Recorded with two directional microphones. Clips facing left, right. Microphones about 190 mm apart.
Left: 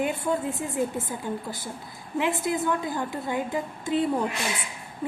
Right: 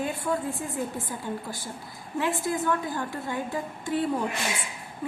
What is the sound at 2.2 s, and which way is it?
A woman's voice, 20° left (ahead or behind).